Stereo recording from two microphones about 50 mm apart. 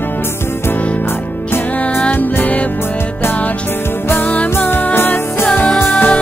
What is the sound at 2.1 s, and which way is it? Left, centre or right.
Music, left.